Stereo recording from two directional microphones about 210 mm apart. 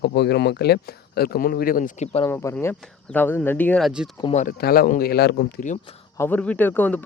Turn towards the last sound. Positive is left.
turn(degrees=10)  # may be behind; listen again after turning